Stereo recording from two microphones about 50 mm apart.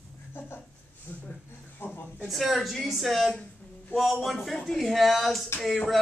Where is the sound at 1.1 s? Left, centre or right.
Left.